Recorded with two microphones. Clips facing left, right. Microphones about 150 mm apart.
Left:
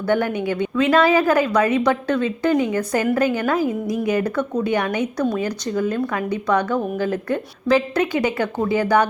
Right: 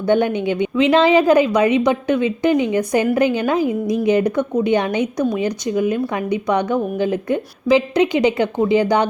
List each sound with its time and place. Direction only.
0.0 s speech: 20° right (ahead or behind)